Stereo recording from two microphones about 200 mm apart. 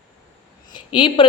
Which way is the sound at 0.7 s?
25° left (ahead or behind).